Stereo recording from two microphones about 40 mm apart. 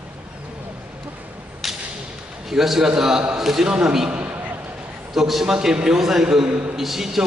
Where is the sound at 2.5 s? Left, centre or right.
Centre.